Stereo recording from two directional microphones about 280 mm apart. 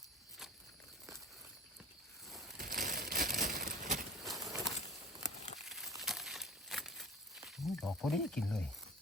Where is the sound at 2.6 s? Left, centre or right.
Right.